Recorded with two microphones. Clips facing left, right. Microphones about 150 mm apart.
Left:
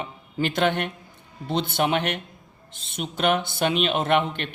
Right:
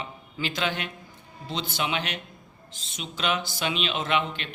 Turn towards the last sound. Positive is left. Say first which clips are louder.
# left 5 dB
turn(degrees=55)  # may be behind; listen again after turning